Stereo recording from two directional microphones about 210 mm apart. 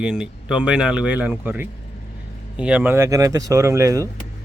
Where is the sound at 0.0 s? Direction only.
5° right (ahead or behind).